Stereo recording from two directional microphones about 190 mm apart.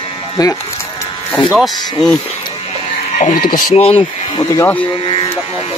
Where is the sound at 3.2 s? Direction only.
40° left (ahead or behind).